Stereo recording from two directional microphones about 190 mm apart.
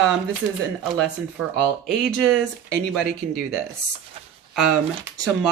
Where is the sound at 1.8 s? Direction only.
Centre (ahead or behind).